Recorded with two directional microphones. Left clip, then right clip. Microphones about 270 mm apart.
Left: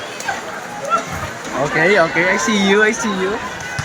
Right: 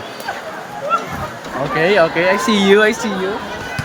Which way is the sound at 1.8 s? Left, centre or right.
Centre.